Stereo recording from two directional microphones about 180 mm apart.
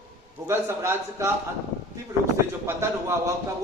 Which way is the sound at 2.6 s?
15° right (ahead or behind).